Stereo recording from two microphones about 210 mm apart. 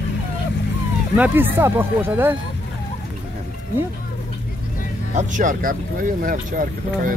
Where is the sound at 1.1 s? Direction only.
10° right (ahead or behind).